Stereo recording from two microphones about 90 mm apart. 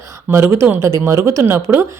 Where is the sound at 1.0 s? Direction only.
30° right (ahead or behind).